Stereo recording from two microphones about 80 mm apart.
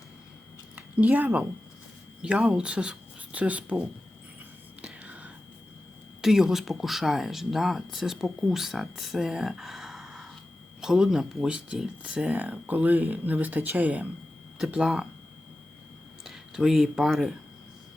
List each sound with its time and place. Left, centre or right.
0.8 s speech: centre
4.8 s whispering: centre
6.2 s speech: centre
16.2 s speech: centre